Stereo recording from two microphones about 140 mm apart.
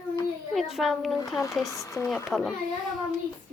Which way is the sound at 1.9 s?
20° left (ahead or behind).